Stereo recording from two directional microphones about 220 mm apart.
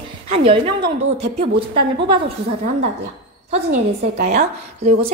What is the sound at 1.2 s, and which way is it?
A woman's voice, 30° right (ahead or behind).